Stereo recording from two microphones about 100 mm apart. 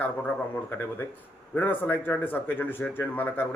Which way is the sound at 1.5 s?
20° left (ahead or behind).